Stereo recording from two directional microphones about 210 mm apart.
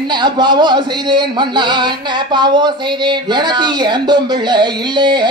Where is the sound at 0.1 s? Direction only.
20° right (ahead or behind).